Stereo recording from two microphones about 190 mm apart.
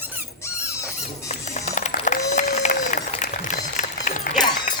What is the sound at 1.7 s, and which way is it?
Run, 40° left (ahead or behind).